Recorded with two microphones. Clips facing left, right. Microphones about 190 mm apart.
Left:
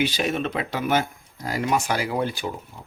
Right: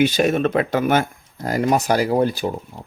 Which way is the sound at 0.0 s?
50° right (ahead or behind).